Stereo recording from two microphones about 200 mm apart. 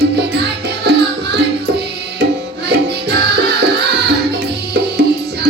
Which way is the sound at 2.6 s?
55° right (ahead or behind).